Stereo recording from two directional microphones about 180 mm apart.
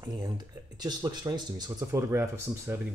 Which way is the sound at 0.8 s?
20° right (ahead or behind).